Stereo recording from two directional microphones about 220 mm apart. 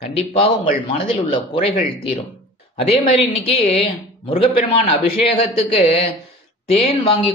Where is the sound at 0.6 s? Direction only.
25° left (ahead or behind).